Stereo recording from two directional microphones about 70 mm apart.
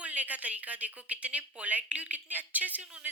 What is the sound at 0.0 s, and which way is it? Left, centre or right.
Speech, right.